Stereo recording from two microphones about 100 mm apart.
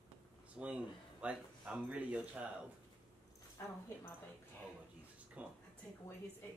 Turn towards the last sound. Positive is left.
turn(degrees=-15)  # may be behind; listen again after turning